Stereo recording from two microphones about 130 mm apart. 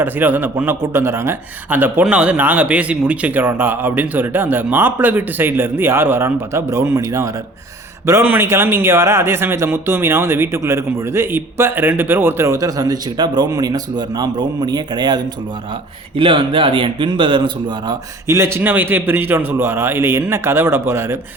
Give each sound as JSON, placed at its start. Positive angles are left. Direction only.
{"t": 0.0, "sound": "a man's voice", "side_deg": -15}
{"t": 18.3, "sound": "a man's voice", "side_deg": -20}